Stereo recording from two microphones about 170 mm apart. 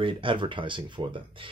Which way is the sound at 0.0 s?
30° right (ahead or behind).